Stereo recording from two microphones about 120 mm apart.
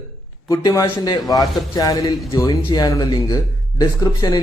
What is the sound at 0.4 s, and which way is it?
A man's voice, 25° left (ahead or behind).